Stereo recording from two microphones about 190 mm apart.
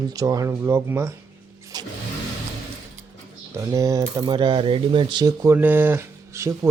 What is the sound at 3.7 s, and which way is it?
Speech, 20° right (ahead or behind).